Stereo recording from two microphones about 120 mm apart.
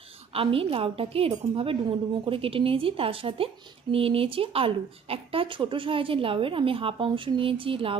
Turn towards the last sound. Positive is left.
turn(degrees=-50)  # may be behind; listen again after turning